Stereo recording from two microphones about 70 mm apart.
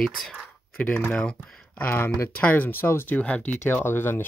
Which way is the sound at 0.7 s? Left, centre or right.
Left.